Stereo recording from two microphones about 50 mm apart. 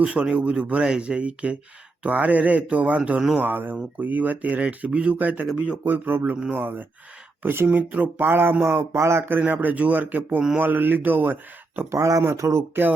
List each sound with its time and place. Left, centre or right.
0.0 s speech: right
3.3 s speech: right
7.4 s a sound: right
7.7 s speech: right
8.3 s a sound: right
9.4 s speech: right
11.9 s speech: right